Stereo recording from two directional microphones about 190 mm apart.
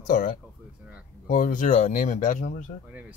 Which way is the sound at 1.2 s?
45° left (ahead or behind).